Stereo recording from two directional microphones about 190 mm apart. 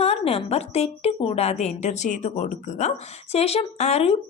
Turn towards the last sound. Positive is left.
turn(degrees=30)  # may be behind; listen again after turning